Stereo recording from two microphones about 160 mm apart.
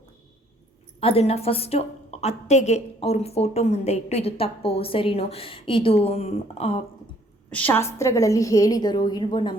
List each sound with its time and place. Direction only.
0.9 s a woman's voice: 35° left (ahead or behind)
7.5 s a woman's voice: 10° left (ahead or behind); by 9.6 s 30° left (ahead or behind)